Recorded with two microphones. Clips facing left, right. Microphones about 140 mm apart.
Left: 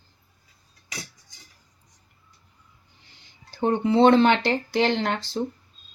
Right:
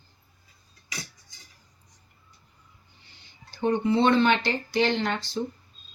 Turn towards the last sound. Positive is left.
turn(degrees=90)